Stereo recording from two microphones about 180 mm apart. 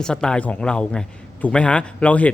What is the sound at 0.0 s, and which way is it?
A man's voice, 5° left (ahead or behind).